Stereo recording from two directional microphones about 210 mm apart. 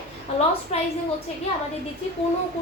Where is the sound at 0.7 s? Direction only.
30° left (ahead or behind).